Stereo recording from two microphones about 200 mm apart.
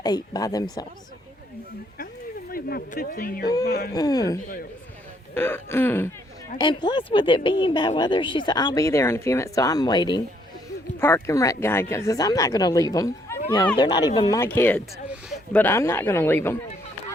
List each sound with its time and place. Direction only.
0.0 s speech: 20° left (ahead or behind)
2.5 s speech: 50° left (ahead or behind)
3.6 s speech: 55° left (ahead or behind)
3.9 s speech: 20° left (ahead or behind)
6.6 s speech: 20° left (ahead or behind)